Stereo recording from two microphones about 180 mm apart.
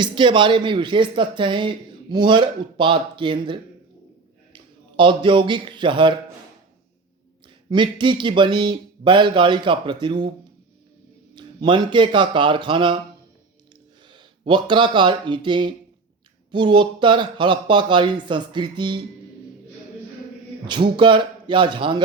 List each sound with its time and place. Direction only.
0.0 s a man's voice: 25° right (ahead or behind)
7.7 s speech: 25° right (ahead or behind)
11.3 s speech: 25° right (ahead or behind)
14.1 s speech: 25° right (ahead or behind)
20.7 s speech: 25° right (ahead or behind)